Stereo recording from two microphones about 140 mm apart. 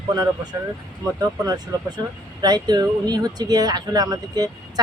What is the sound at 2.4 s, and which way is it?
Speech, 30° right (ahead or behind).